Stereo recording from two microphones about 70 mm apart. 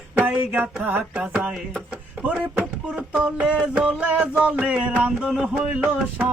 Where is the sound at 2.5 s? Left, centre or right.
Right.